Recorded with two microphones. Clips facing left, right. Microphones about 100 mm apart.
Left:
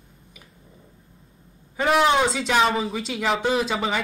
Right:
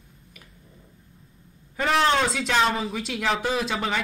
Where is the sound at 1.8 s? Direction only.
5° left (ahead or behind).